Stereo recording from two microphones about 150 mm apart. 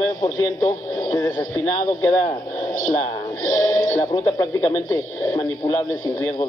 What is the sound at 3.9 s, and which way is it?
Speech, 25° left (ahead or behind).